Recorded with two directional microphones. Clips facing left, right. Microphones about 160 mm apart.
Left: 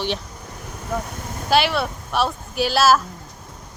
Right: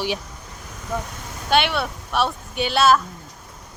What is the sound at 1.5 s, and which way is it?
Speech, centre (ahead or behind).